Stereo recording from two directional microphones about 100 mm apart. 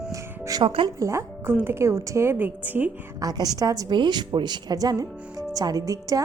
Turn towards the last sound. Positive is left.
turn(degrees=-35)  # may be behind; listen again after turning